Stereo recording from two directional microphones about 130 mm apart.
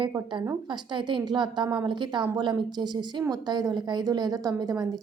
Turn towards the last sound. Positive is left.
turn(degrees=-30)  # may be behind; listen again after turning